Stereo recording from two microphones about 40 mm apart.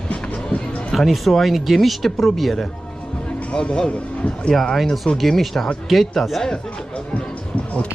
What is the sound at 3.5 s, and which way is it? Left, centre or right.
Speech, left.